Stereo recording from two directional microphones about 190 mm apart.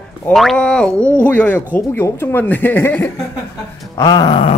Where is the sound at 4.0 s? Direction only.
20° left (ahead or behind).